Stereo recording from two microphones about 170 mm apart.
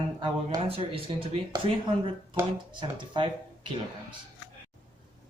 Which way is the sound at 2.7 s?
30° right (ahead or behind).